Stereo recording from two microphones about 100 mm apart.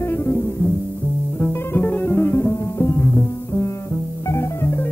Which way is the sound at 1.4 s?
20° left (ahead or behind).